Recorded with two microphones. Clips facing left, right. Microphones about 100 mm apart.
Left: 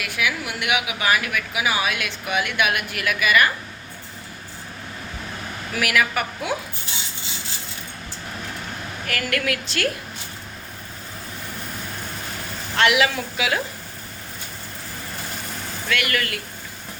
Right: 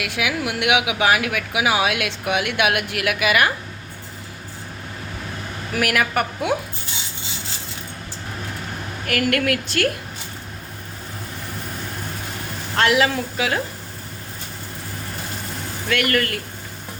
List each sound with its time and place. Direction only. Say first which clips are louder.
0.0 s speech: right 2 dB; 90° right; by 3.5 s 70° right (ahead or behind)
5.7 s a woman's voice: right 2 dB; 50° right (ahead or behind)
9.0 s a woman's voice: right 5 dB; 55° right (ahead or behind)
12.7 s speech: right 1 dB; 40° right (ahead or behind)
15.9 s a woman's voice: right 4 dB; 45° right (ahead or behind)